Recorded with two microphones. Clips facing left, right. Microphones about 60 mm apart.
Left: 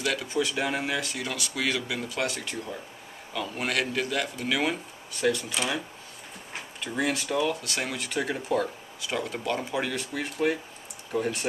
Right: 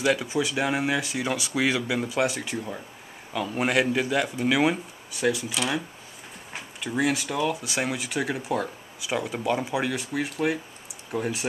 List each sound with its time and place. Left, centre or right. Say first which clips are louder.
0.0 s speech: right 4 dB; centre